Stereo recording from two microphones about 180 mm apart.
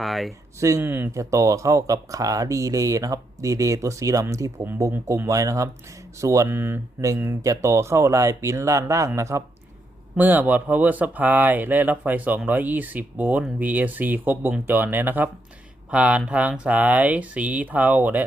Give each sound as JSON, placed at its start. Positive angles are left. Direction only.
{"t": 0.0, "sound": "speech", "side_deg": 0}
{"t": 0.6, "sound": "speech", "side_deg": -15}